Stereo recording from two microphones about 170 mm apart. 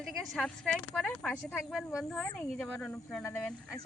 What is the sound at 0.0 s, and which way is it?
Speech, centre (ahead or behind).